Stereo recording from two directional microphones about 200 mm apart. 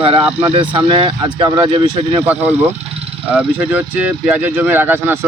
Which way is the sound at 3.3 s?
10° right (ahead or behind).